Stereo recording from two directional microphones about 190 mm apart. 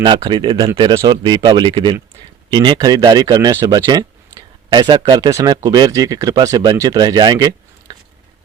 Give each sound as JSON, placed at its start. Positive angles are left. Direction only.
{"t": 0.0, "sound": "speech", "side_deg": -25}